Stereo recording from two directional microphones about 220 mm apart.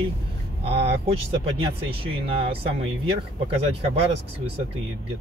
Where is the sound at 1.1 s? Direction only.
25° right (ahead or behind).